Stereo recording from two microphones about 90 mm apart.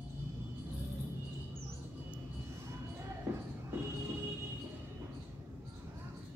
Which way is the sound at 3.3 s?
35° right (ahead or behind).